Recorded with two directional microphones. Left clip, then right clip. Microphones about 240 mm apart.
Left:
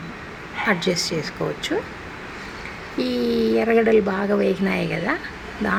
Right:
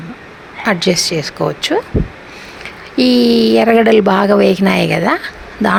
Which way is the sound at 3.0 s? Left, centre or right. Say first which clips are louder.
Right 11 dB; right.